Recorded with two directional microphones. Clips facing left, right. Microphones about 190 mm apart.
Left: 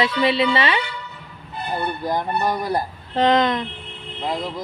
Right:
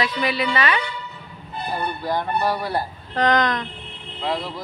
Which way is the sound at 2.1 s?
20° left (ahead or behind).